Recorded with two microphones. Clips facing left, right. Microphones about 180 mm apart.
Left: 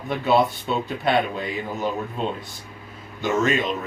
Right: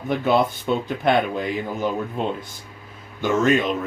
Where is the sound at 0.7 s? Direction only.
55° right (ahead or behind).